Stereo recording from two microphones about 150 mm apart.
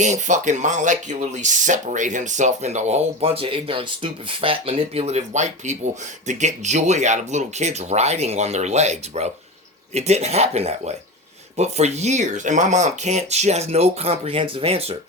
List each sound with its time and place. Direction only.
0.0 s speech: 55° right (ahead or behind)